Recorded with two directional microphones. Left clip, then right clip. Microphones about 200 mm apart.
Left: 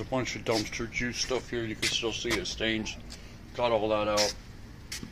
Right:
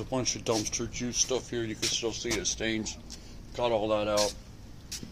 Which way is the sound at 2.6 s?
15° right (ahead or behind).